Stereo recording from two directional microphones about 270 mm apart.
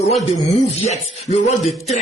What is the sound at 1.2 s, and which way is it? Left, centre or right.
Speech, left.